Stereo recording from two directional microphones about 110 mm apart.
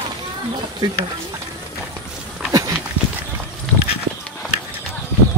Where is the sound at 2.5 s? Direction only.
30° right (ahead or behind).